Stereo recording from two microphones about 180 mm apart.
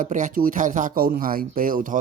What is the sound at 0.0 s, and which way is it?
Speech, 45° right (ahead or behind).